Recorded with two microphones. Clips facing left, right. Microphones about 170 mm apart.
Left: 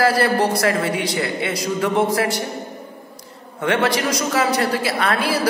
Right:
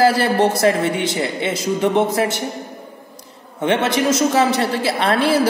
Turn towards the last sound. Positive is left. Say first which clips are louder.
# right 4 dB
turn(degrees=-30)  # may be behind; listen again after turning